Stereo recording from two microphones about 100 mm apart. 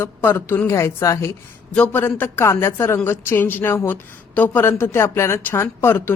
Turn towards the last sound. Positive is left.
turn(degrees=25)  # may be behind; listen again after turning